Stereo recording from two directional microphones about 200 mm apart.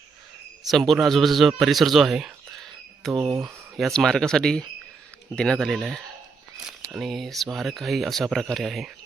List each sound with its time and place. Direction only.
0.7 s a man's voice: centre (ahead or behind)
3.2 s speech: 20° right (ahead or behind)
3.8 s speech: centre (ahead or behind)